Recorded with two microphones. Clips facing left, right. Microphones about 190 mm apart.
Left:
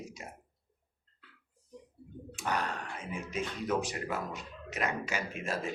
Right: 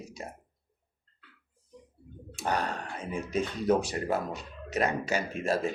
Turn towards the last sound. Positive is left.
turn(degrees=-35)  # may be behind; listen again after turning